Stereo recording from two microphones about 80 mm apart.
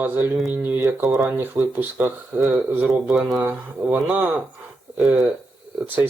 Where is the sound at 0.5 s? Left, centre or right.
Right.